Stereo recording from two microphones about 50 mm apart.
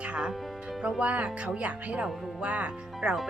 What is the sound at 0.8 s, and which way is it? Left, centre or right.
Speech, centre.